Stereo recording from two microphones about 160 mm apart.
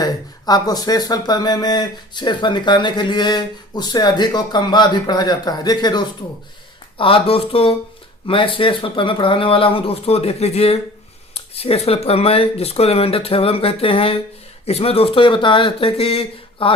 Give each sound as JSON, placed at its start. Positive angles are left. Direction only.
{"t": 0.0, "sound": "speech", "side_deg": 25}